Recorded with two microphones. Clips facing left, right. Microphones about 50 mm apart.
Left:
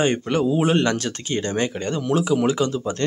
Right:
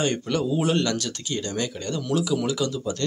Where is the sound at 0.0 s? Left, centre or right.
Left.